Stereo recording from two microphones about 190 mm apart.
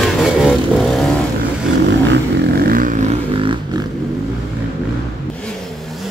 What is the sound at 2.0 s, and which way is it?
Vehicle, 50° right (ahead or behind).